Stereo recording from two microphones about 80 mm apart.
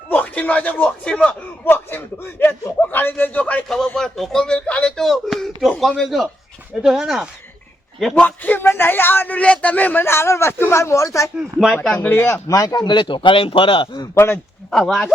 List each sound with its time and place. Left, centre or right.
0.1 s speech: centre
1.6 s a man's voice: left
3.9 s speech: centre
8.1 s a man's voice: centre; by 11.3 s left
11.3 s speech: centre
11.9 s a man's voice: left
12.5 s a man's voice: left
14.2 s a man's voice: left
14.7 s speech: centre